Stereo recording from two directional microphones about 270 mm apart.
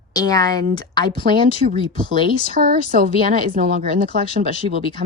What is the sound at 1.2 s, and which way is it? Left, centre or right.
A woman's voice, right.